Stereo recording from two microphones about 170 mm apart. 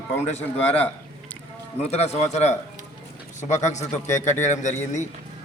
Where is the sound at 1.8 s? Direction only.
40° left (ahead or behind).